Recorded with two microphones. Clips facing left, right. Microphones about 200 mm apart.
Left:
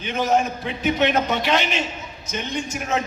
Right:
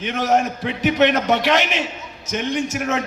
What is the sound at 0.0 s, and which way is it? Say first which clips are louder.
A man's voice: right 2 dB; 75° right (ahead or behind).